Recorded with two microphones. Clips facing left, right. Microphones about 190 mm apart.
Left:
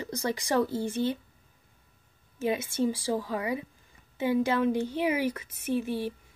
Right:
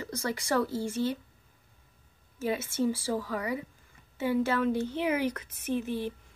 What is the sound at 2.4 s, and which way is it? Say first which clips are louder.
A woman's voice: left 2 dB; 15° left (ahead or behind).